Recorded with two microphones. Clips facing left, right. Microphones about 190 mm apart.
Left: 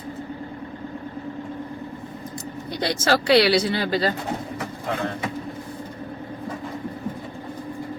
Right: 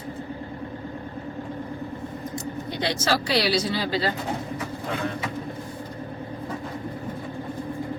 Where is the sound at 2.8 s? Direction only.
50° left (ahead or behind).